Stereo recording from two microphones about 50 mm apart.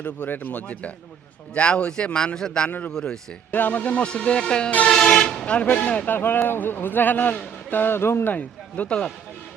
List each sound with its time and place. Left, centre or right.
0.0 s a man's voice: left; by 2.6 s centre
2.6 s a man's voice: left; by 5.5 s centre
5.5 s speech: left
6.1 s a man's voice: left
8.3 s speech: left